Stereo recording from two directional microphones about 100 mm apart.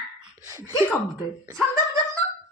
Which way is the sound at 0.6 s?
25° left (ahead or behind).